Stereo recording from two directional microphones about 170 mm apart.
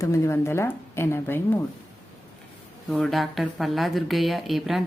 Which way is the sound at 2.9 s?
Centre (ahead or behind).